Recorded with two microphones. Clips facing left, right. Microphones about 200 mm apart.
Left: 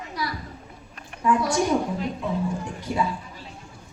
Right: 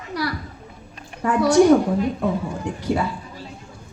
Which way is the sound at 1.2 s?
70° right (ahead or behind).